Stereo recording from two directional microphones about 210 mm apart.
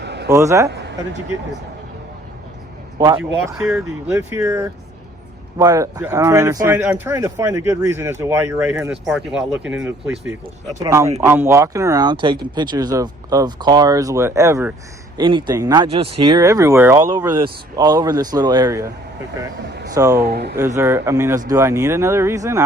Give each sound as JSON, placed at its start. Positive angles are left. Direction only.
{"t": 0.0, "sound": "a sound", "side_deg": -55}
{"t": 0.3, "sound": "speech", "side_deg": -15}
{"t": 0.7, "sound": "speech", "side_deg": -55}
{"t": 3.4, "sound": "speech", "side_deg": -15}
{"t": 19.9, "sound": "speech", "side_deg": -15}
{"t": 20.1, "sound": "speech", "side_deg": -50}
{"t": 20.6, "sound": "speech", "side_deg": -15}